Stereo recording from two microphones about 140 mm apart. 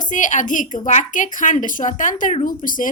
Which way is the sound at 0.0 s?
65° left (ahead or behind).